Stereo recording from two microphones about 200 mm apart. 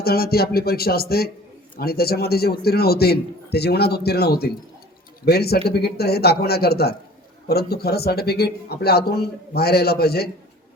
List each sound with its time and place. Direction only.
0.0 s a man's voice: 50° left (ahead or behind)